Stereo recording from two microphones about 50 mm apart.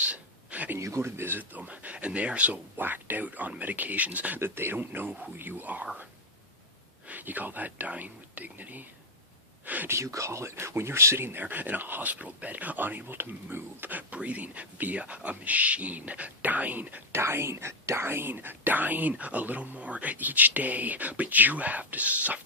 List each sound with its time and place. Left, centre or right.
0.0 s a sound: right
0.8 s speech: right
1.1 s speech: right
2.7 s speech: right
4.4 s speech: right
7.1 s speech: right
9.9 s speech: right
11.4 s speech: right
14.1 s speech: right
17.1 s speech: right